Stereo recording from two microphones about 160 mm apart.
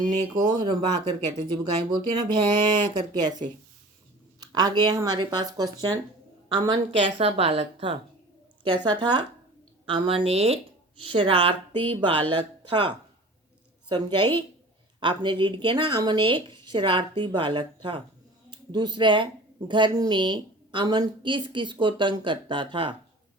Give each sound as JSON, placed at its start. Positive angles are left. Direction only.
{"t": 0.4, "sound": "a woman's voice", "side_deg": -30}